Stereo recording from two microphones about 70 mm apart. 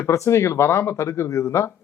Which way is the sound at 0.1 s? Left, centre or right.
Left.